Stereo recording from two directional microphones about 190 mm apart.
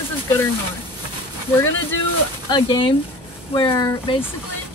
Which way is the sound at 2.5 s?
25° left (ahead or behind).